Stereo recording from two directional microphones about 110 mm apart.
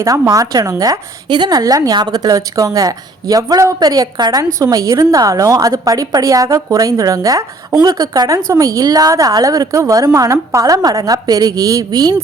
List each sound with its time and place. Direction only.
0.0 s a woman's voice: 30° right (ahead or behind)